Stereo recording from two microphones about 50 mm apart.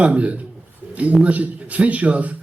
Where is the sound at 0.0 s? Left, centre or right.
Right.